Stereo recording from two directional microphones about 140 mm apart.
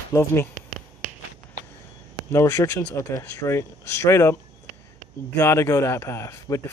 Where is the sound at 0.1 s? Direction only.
20° left (ahead or behind).